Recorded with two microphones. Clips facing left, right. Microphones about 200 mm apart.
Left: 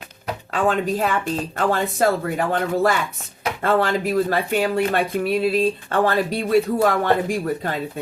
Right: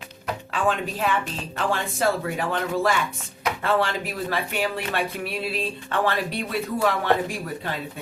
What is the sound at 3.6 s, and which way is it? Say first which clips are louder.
Speech: left 5 dB; 45° left (ahead or behind).